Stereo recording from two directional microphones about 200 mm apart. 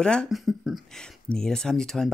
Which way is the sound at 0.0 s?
5° left (ahead or behind).